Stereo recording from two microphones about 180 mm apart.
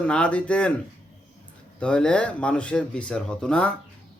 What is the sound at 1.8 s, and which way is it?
Speech, 5° left (ahead or behind).